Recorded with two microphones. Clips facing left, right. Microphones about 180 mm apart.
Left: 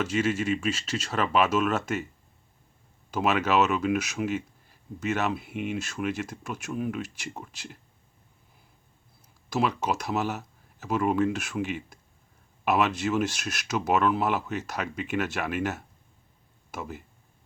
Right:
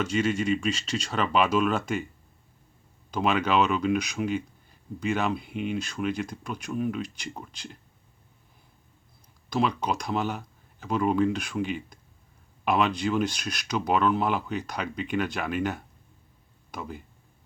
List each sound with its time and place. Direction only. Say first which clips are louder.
0.0 s speech: right 1 dB; 5° left (ahead or behind)
3.1 s speech: even; 5° left (ahead or behind)
9.5 s speech: even; 5° left (ahead or behind)